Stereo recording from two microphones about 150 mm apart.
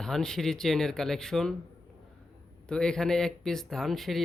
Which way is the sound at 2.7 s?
5° left (ahead or behind).